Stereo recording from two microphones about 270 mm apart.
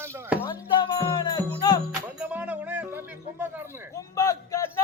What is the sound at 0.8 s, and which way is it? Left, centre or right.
Speech, centre.